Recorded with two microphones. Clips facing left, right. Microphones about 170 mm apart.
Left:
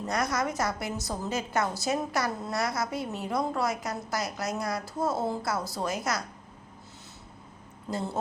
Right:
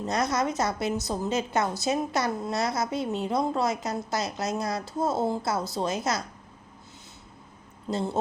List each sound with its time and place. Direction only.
0.0 s a woman's voice: 25° right (ahead or behind)
7.9 s a woman's voice: 25° right (ahead or behind)